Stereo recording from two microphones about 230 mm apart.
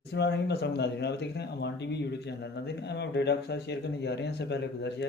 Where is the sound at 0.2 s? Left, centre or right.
Left.